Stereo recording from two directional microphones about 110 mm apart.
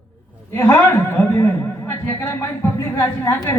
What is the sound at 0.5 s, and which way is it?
Chuckle, 20° left (ahead or behind).